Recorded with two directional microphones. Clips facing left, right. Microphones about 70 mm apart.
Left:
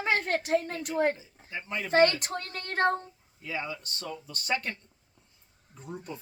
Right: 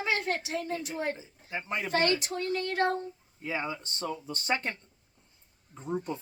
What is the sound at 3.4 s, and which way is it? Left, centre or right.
Speech, right.